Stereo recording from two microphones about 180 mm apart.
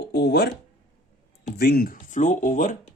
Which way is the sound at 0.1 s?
65° left (ahead or behind).